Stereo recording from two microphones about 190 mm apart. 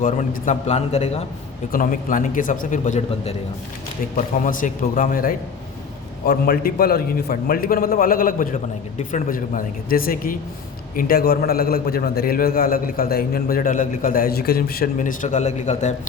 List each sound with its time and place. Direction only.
0.0 s a man's voice: 40° left (ahead or behind)
1.7 s a man's voice: 45° left (ahead or behind)
4.4 s a man's voice: 45° left (ahead or behind)